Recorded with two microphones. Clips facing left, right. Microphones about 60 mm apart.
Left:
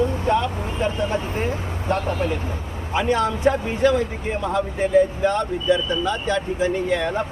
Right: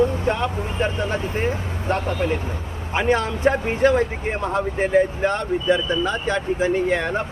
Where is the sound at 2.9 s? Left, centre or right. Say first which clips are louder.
Even; right.